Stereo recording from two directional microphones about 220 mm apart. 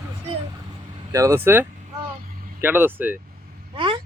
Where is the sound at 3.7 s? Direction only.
20° right (ahead or behind).